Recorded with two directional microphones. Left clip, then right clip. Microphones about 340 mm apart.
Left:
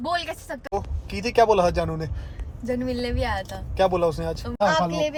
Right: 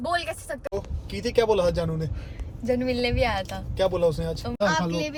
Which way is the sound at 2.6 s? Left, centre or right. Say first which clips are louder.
Right 2 dB; centre.